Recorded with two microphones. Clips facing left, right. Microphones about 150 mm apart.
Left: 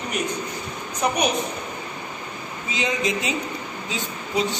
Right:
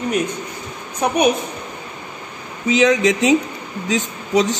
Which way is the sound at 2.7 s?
90° right.